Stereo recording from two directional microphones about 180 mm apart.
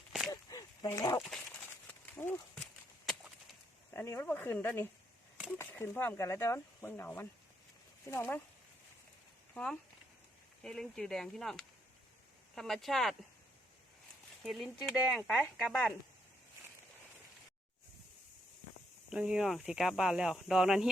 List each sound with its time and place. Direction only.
0.3 s a sound: 20° left (ahead or behind)
1.9 s horse: 10° left (ahead or behind)
3.9 s speech: 15° left (ahead or behind)
10.6 s speech: 5° left (ahead or behind)
14.4 s speech: centre (ahead or behind)
19.1 s speech: 5° right (ahead or behind)